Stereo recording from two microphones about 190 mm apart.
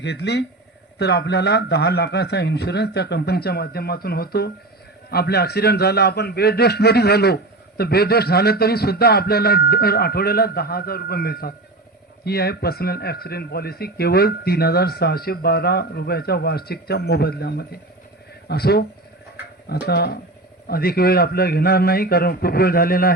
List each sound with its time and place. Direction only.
0.0 s a man's voice: 60° left (ahead or behind)